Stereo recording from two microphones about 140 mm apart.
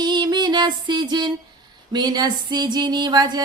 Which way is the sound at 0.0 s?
30° right (ahead or behind).